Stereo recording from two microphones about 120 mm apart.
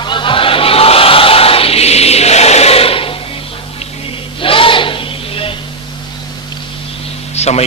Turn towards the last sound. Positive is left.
turn(degrees=65)  # may be behind; listen again after turning